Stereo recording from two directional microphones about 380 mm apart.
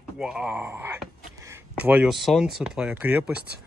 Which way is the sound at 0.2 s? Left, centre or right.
Centre.